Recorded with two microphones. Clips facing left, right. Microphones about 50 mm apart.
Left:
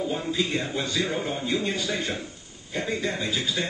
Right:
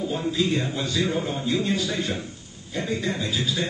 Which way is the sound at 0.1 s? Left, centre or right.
Centre.